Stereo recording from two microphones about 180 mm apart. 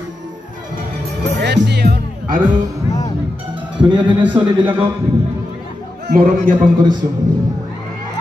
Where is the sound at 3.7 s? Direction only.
25° right (ahead or behind).